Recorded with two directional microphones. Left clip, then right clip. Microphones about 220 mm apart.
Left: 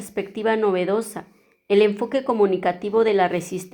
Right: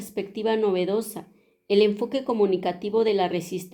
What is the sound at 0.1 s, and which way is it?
A woman's voice, 15° left (ahead or behind).